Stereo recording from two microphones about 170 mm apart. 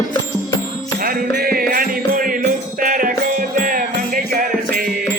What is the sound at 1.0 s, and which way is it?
Music, 55° right (ahead or behind).